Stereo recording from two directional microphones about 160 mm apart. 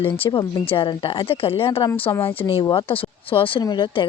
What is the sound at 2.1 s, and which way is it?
Speech, 15° left (ahead or behind).